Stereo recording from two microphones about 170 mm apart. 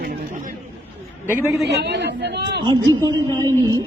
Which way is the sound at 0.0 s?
60° right (ahead or behind).